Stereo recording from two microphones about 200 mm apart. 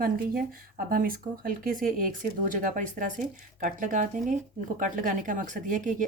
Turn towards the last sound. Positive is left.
turn(degrees=-40)  # may be behind; listen again after turning